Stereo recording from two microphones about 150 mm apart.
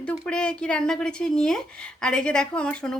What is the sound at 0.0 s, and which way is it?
Speech, 5° left (ahead or behind).